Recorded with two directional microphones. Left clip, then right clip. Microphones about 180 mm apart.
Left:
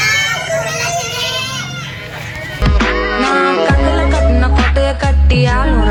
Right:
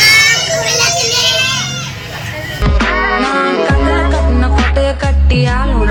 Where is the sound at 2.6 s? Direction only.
Centre (ahead or behind).